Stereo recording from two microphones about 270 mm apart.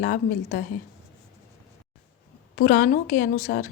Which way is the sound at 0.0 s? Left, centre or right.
Left.